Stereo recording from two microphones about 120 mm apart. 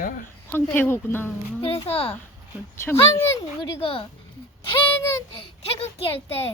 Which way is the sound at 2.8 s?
20° left (ahead or behind).